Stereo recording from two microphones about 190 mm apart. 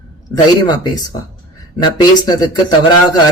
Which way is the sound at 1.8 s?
20° left (ahead or behind).